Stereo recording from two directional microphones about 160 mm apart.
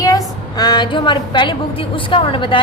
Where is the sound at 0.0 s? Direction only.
25° left (ahead or behind).